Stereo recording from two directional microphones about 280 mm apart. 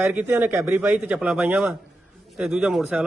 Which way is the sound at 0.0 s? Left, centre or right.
Centre.